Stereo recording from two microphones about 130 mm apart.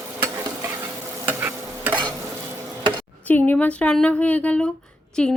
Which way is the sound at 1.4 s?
15° right (ahead or behind).